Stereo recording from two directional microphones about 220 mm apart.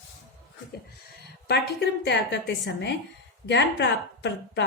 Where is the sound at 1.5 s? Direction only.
50° left (ahead or behind).